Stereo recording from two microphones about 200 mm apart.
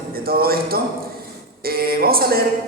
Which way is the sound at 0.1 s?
50° right (ahead or behind).